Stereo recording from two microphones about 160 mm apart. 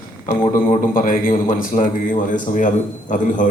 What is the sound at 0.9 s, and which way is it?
A man's voice, 60° left (ahead or behind).